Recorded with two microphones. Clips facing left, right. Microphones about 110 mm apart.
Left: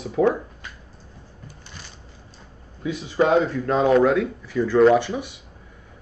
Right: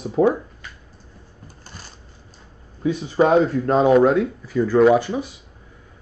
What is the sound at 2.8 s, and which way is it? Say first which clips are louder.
Speech: right 3 dB; 40° right (ahead or behind).